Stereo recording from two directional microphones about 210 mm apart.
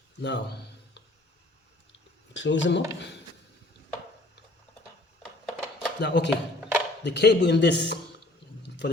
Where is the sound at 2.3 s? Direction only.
60° left (ahead or behind).